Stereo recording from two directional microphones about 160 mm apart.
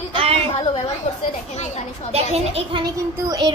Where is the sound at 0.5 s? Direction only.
35° left (ahead or behind).